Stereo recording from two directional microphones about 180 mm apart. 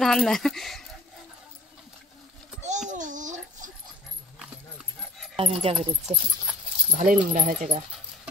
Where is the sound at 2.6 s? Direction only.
40° right (ahead or behind).